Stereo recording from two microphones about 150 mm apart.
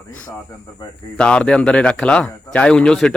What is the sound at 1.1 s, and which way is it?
Speech, 5° left (ahead or behind).